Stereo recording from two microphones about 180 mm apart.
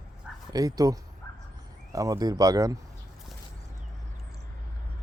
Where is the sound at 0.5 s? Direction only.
20° right (ahead or behind).